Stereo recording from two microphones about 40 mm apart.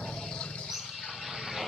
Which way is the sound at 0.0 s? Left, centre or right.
Centre.